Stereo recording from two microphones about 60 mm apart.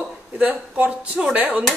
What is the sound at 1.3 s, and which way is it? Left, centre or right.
Speech, right.